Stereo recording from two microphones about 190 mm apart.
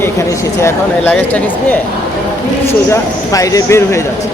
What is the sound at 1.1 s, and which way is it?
Speech, 10° left (ahead or behind).